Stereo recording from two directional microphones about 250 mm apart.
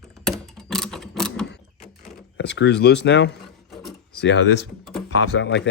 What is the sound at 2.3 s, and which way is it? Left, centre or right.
Speech, left.